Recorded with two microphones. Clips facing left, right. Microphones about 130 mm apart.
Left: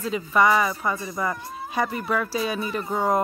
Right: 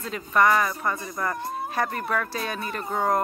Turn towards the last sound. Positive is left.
turn(degrees=5)  # may be behind; listen again after turning